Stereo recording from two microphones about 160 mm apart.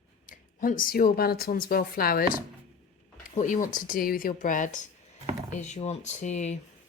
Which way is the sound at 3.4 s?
55° left (ahead or behind).